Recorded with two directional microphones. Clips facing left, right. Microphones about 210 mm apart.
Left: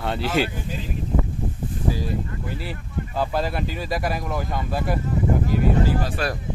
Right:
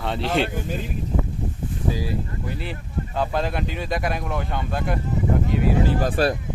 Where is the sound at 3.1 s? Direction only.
5° left (ahead or behind).